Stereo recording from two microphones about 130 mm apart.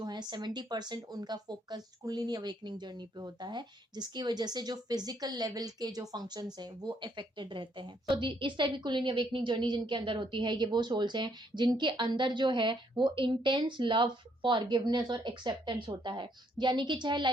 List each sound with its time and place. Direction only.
0.0 s speech: 35° right (ahead or behind)